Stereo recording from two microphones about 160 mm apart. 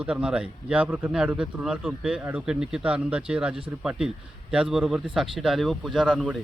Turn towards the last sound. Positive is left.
turn(degrees=-5)  # may be behind; listen again after turning